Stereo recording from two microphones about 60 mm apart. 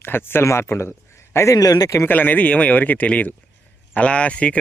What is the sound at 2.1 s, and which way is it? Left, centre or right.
Speech, left.